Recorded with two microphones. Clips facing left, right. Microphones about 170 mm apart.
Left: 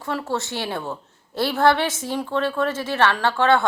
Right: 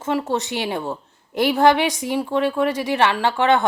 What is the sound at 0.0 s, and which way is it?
Speech, 20° right (ahead or behind).